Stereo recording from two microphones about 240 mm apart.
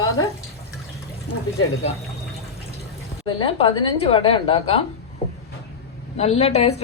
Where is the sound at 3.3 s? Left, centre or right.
Left.